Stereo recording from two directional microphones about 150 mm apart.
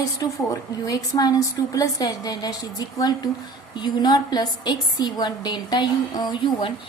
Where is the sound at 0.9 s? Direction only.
25° left (ahead or behind).